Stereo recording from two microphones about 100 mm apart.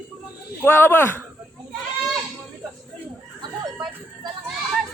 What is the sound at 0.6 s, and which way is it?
Speech, 20° left (ahead or behind).